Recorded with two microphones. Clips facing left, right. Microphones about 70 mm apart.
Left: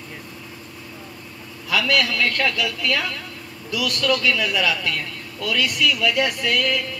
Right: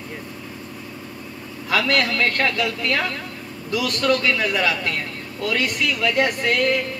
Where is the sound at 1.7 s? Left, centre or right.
Right.